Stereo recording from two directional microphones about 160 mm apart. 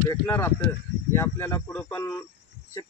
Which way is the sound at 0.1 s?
15° left (ahead or behind).